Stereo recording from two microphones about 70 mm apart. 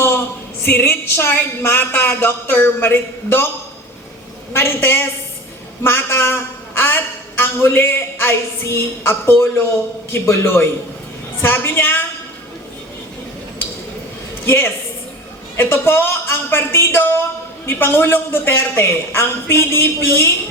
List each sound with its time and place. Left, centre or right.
0.7 s a man's voice: left
4.5 s a man's voice: left
14.4 s a woman's voice: left